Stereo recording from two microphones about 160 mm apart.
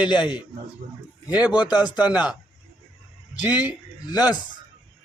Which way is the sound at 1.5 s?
25° left (ahead or behind).